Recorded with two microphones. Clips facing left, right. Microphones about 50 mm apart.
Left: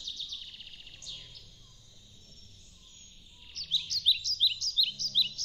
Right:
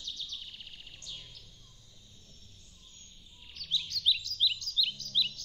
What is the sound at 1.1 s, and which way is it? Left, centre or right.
Bird, right.